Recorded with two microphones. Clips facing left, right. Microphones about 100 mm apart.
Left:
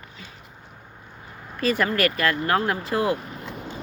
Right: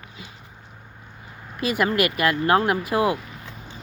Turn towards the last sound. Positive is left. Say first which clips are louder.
# right 2 dB
turn(degrees=-15)  # may be behind; listen again after turning